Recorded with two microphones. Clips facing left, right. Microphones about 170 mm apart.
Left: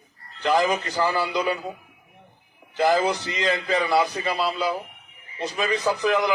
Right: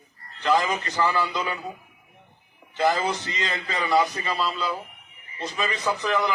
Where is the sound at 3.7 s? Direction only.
35° left (ahead or behind).